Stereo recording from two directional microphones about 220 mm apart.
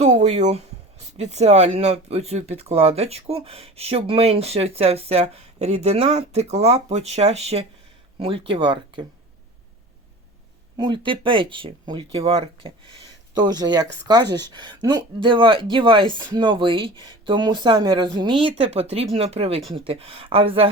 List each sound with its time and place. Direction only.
0.0 s speech: 30° right (ahead or behind)
10.8 s speech: 20° right (ahead or behind)